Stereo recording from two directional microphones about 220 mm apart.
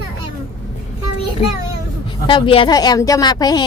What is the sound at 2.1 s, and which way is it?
Speech, 20° left (ahead or behind).